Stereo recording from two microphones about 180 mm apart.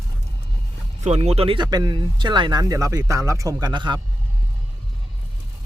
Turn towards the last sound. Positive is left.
turn(degrees=-25)  # may be behind; listen again after turning